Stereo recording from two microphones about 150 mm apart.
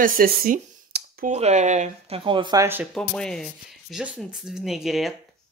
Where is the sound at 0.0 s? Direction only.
70° right (ahead or behind).